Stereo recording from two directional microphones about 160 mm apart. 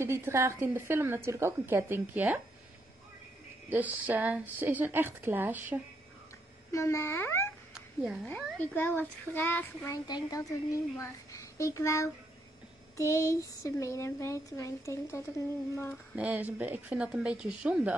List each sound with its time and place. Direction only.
0.0 s a woman's voice: 15° right (ahead or behind)
3.6 s a woman's voice: 10° right (ahead or behind)
6.7 s speech: 20° left (ahead or behind)
7.7 s a sound: 5° right (ahead or behind)
8.3 s speech: 10° left (ahead or behind)
10.0 s speech: 25° left (ahead or behind)
16.2 s a woman's voice: 10° right (ahead or behind)